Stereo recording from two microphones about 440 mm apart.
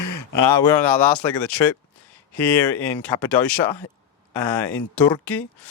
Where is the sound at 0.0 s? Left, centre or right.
Left.